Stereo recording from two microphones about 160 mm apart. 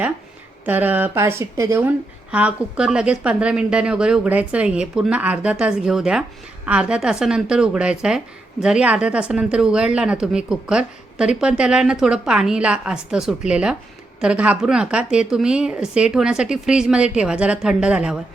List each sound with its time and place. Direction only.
0.6 s a woman's voice: 10° right (ahead or behind)